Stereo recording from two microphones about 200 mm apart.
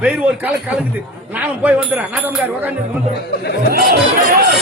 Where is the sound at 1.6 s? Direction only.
10° right (ahead or behind).